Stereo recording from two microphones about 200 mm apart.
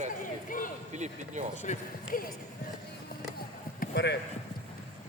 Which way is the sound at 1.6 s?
35° left (ahead or behind).